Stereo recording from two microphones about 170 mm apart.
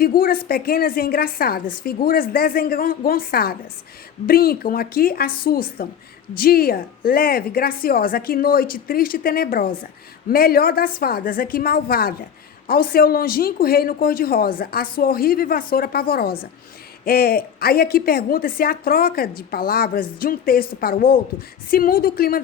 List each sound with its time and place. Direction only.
0.0 s a woman's voice: 60° left (ahead or behind)